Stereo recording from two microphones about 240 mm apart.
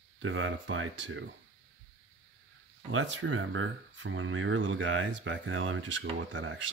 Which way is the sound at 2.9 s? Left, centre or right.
Right.